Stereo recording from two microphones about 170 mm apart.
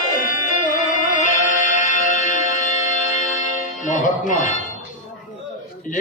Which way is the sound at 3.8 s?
50° left (ahead or behind).